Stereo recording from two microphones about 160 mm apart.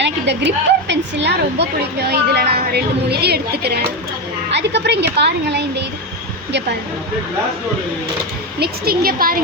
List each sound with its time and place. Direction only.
0.0 s a woman's voice: 90° right
8.5 s speech: 75° right (ahead or behind)